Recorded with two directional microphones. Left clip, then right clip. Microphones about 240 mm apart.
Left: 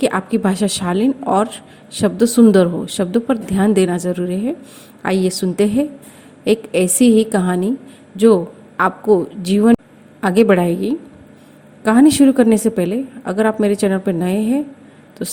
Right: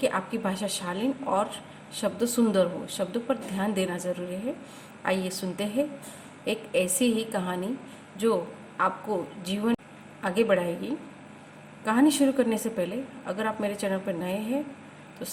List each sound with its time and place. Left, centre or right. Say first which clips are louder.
0.0 s a woman's voice: left 10 dB; left
8.8 s a woman's voice: left 13 dB; left